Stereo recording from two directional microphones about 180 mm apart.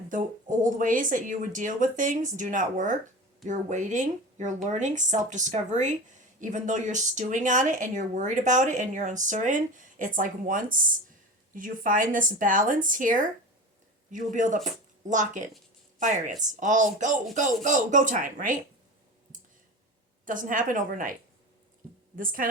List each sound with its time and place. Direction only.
0.1 s speech: 45° right (ahead or behind)
20.2 s speech: 50° right (ahead or behind)